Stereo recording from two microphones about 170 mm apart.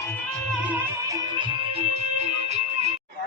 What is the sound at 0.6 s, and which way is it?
Music, 15° right (ahead or behind).